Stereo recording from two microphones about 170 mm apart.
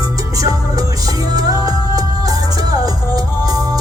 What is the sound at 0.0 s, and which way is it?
Music, 20° right (ahead or behind).